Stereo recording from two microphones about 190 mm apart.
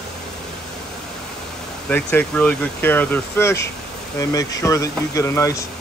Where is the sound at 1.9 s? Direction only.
10° left (ahead or behind).